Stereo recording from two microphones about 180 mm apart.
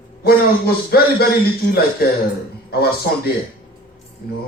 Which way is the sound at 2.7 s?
60° left (ahead or behind).